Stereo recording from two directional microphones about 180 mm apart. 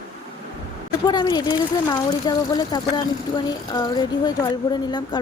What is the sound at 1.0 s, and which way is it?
Speech, 25° left (ahead or behind).